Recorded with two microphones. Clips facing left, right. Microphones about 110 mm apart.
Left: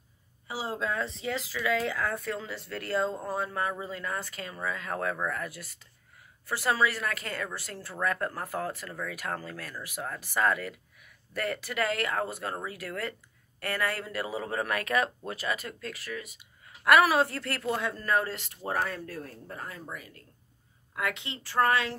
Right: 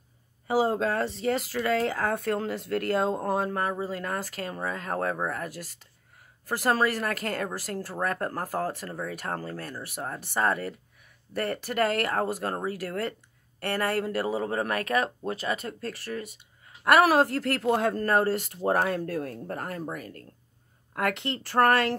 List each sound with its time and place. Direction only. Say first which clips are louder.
0.5 s speech: right 8 dB; 50° right (ahead or behind)
1.7 s speech: right 3 dB; 45° right (ahead or behind)